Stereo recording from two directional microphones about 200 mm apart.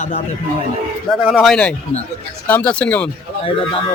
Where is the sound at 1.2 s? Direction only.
Centre (ahead or behind).